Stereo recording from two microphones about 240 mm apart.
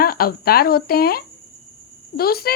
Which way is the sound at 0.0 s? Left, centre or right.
Left.